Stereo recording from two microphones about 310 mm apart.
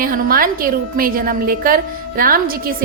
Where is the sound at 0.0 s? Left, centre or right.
Right.